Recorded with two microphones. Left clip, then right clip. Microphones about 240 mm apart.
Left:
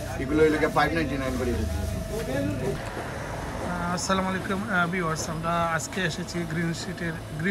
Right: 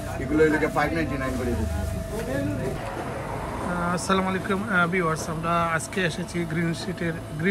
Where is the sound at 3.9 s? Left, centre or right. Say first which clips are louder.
Right 2 dB; centre.